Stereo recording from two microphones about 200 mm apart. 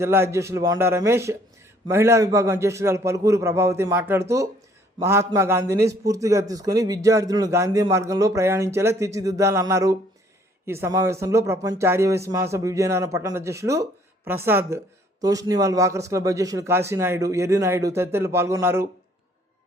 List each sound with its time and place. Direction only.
0.0 s a man's voice: 15° right (ahead or behind)